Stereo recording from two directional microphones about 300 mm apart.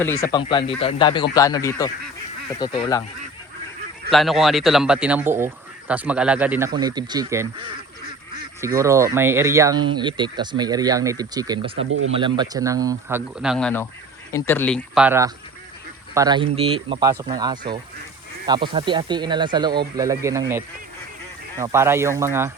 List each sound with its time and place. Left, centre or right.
0.0 s speech: centre
4.1 s a man's voice: centre
11.9 s speech: right
12.1 s a man's voice: centre
21.6 s speech: centre